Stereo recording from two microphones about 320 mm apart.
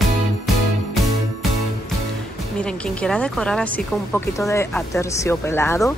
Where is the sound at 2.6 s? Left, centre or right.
Centre.